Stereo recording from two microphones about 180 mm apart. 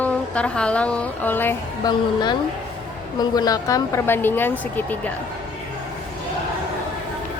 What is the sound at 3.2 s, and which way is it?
A woman's voice, 20° left (ahead or behind).